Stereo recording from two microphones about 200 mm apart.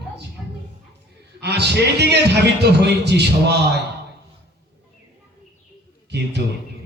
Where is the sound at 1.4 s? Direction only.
55° right (ahead or behind).